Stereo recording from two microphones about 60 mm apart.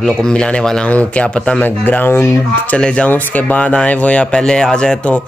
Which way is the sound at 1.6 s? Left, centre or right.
Left.